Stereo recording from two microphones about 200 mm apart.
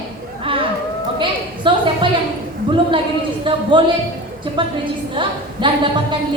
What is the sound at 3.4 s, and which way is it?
A woman's voice, 25° right (ahead or behind).